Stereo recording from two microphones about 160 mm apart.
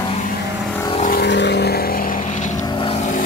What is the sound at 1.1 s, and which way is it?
Vehicle, 90° left.